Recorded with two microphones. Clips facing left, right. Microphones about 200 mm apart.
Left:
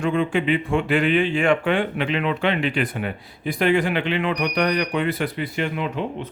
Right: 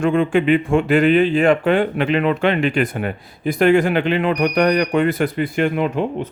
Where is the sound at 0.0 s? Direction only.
50° right (ahead or behind).